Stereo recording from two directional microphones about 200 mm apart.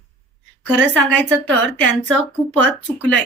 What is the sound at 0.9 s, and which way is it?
A woman's voice, 10° left (ahead or behind).